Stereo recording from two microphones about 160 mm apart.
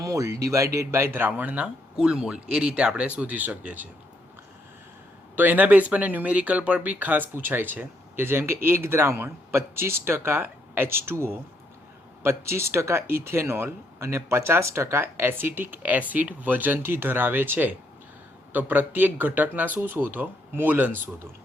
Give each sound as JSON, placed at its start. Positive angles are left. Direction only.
{"t": 0.0, "sound": "speech", "side_deg": -20}
{"t": 5.4, "sound": "speech", "side_deg": -10}